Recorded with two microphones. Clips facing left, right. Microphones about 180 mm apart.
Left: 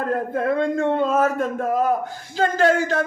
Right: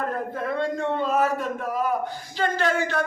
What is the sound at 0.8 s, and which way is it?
Speech, 45° left (ahead or behind).